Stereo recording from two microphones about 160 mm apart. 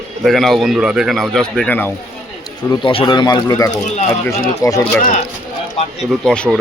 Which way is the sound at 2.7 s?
30° left (ahead or behind).